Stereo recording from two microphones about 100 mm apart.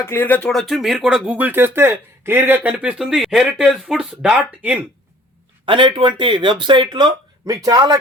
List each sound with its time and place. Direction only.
0.0 s speech: 25° left (ahead or behind)
0.5 s speech: centre (ahead or behind)
5.6 s speech: 55° right (ahead or behind)